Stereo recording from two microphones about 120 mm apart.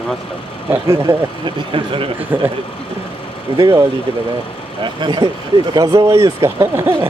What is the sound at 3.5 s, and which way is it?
Speech, 45° right (ahead or behind).